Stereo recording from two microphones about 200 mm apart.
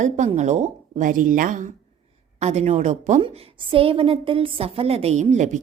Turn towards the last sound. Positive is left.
turn(degrees=-35)  # may be behind; listen again after turning